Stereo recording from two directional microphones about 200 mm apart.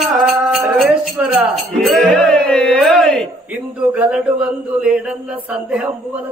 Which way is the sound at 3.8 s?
10° right (ahead or behind).